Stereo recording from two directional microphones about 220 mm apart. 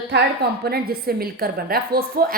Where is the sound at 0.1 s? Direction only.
55° right (ahead or behind).